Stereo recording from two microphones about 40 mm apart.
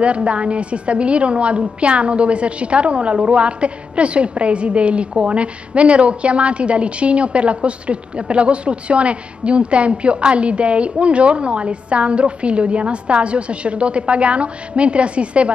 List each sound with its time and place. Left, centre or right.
0.0 s a woman's voice: right